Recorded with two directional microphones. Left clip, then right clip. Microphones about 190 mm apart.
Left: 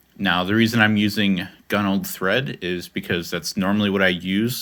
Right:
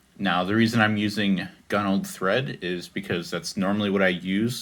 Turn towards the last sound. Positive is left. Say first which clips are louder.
# left 3 dB
turn(degrees=45)  # may be behind; listen again after turning